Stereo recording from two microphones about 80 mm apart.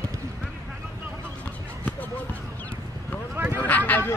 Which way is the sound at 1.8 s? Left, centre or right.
Left.